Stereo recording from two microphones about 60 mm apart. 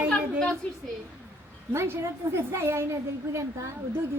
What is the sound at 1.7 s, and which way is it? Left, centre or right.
A woman's voice, right.